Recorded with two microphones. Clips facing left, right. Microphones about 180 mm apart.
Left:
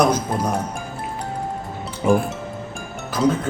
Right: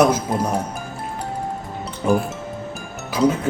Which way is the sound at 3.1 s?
10° right (ahead or behind).